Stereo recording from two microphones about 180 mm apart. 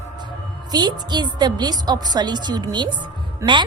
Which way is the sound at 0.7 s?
25° right (ahead or behind).